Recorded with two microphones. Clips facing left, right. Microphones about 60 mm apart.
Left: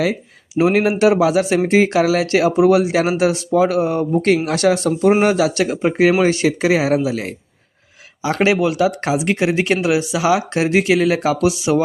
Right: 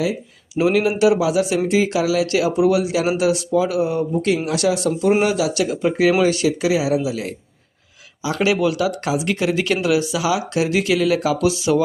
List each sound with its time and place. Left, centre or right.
0.6 s speech: left
8.5 s speech: left
11.4 s speech: left